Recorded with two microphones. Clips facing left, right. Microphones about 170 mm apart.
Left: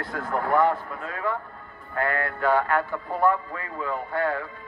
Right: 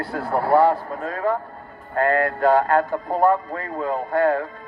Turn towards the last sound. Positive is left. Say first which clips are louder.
# right 7 dB
turn(degrees=-40)  # may be behind; listen again after turning